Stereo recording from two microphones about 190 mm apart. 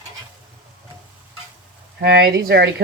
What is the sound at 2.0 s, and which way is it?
Speech, 60° right (ahead or behind).